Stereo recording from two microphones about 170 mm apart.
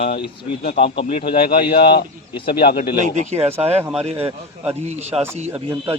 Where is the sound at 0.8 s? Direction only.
35° left (ahead or behind).